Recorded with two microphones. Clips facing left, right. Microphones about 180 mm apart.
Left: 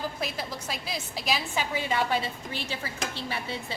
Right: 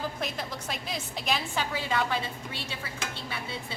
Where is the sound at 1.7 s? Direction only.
20° left (ahead or behind).